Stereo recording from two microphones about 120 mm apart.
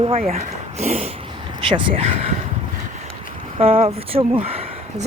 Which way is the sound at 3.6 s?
55° right (ahead or behind).